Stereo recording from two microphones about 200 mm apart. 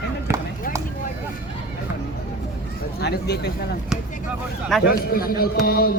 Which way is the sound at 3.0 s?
55° left (ahead or behind).